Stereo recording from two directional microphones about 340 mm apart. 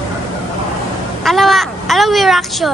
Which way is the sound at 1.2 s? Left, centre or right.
Centre.